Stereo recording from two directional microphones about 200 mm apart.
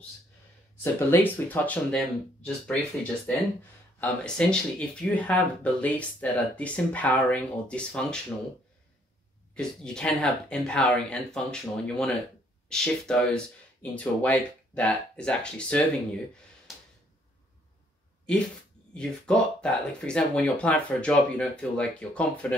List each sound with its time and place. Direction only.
0.9 s speech: 10° left (ahead or behind)
9.6 s speech: 5° left (ahead or behind)
18.9 s speech: 5° left (ahead or behind)